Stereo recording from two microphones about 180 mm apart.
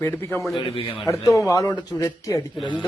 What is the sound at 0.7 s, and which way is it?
Speech, 30° left (ahead or behind).